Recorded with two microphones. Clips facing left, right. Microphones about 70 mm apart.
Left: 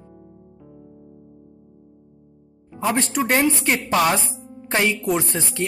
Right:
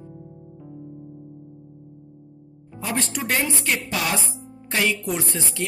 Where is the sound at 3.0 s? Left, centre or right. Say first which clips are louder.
Left 5 dB; left.